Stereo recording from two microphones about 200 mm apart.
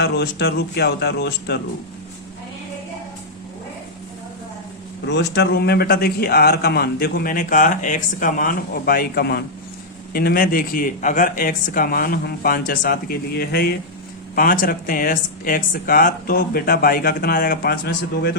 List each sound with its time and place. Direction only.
0.0 s speech: 55° left (ahead or behind)
5.0 s speech: 60° left (ahead or behind)